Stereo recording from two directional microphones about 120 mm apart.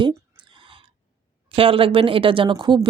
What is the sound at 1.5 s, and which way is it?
Speech, 50° right (ahead or behind).